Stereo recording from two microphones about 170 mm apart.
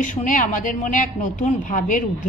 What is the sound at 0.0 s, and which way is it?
A woman's voice, 50° left (ahead or behind).